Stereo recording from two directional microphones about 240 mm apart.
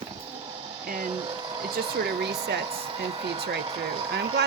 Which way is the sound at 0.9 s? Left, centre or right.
Right.